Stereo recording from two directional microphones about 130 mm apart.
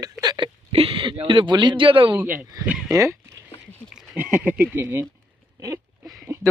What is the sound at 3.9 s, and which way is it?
Speech, 10° right (ahead or behind).